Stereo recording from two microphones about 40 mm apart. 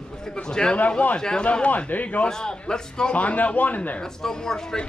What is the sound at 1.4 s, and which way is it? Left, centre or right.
Speech, left.